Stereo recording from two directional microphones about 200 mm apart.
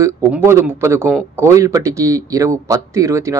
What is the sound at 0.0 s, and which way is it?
Speech, 15° right (ahead or behind).